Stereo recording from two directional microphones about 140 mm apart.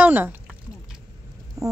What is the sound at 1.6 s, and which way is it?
Hum, 20° right (ahead or behind).